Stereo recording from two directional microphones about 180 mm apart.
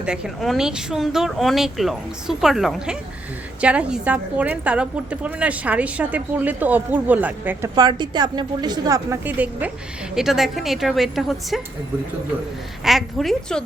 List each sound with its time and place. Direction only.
0.0 s a woman's voice: 5° right (ahead or behind)
7.8 s a woman's voice: 25° right (ahead or behind); by 11.6 s centre (ahead or behind)
12.8 s speech: centre (ahead or behind)